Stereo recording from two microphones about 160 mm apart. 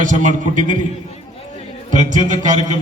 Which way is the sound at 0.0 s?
55° right (ahead or behind).